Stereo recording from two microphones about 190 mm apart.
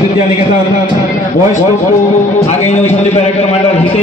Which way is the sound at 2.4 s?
35° left (ahead or behind).